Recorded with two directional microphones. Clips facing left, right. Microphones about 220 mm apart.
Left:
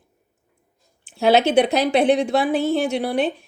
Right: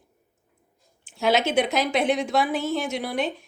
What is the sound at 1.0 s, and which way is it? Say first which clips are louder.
Speech: left 6 dB; 35° left (ahead or behind).